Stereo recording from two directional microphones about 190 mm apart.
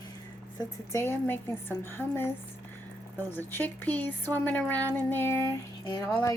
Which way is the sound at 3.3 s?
10° left (ahead or behind).